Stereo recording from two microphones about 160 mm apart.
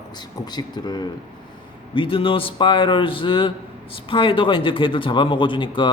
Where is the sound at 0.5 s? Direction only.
25° left (ahead or behind).